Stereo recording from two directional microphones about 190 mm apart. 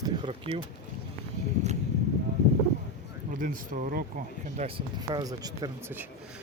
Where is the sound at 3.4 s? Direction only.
45° right (ahead or behind).